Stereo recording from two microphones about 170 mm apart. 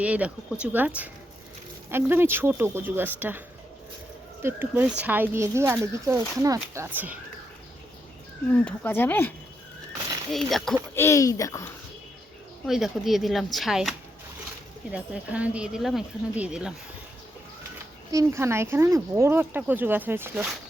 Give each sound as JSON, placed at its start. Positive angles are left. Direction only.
{"t": 0.0, "sound": "speech", "side_deg": -5}
{"t": 4.4, "sound": "speech", "side_deg": -10}
{"t": 8.5, "sound": "speech", "side_deg": 10}
{"t": 10.3, "sound": "speech", "side_deg": 0}
{"t": 10.9, "sound": "speech", "side_deg": 15}
{"t": 12.6, "sound": "speech", "side_deg": 0}
{"t": 14.9, "sound": "speech", "side_deg": -10}
{"t": 18.1, "sound": "speech", "side_deg": -15}